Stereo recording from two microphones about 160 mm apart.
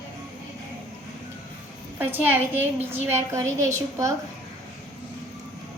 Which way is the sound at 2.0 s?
10° right (ahead or behind).